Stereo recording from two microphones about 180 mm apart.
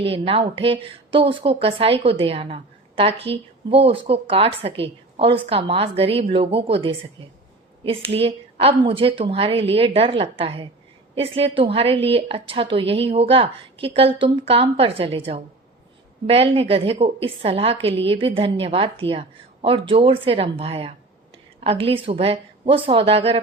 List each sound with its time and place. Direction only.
0.0 s a woman's voice: 30° right (ahead or behind)